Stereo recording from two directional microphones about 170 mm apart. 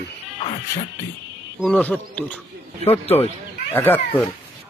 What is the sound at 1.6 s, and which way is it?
Speech, 5° left (ahead or behind).